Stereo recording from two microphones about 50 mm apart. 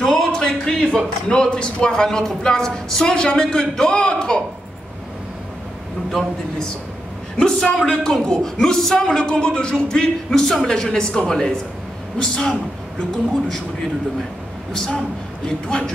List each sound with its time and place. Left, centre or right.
0.0 s a man's voice: centre
7.3 s a man's voice: centre
9.0 s a man's voice: centre
14.7 s a man's voice: centre